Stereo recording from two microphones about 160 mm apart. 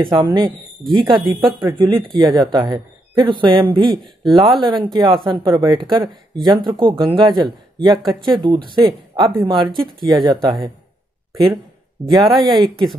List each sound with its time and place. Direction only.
0.0 s speech: 30° right (ahead or behind)
3.9 s speech: centre (ahead or behind)
4.6 s speech: 30° right (ahead or behind)
12.2 s speech: centre (ahead or behind)